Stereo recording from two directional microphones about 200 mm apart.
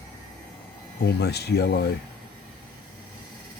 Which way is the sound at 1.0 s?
55° left (ahead or behind).